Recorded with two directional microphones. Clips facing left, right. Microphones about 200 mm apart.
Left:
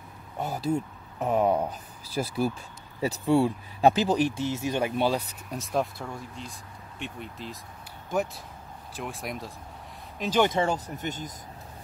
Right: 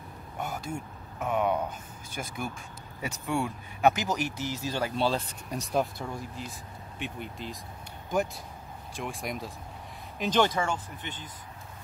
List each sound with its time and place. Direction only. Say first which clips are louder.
0.4 s speech: left 7 dB; 35° left (ahead or behind); by 5.2 s 15° left (ahead or behind)
5.5 s speech: even; centre (ahead or behind)
8.9 s speech: even; centre (ahead or behind)
10.6 s speech: left 5 dB; 40° left (ahead or behind)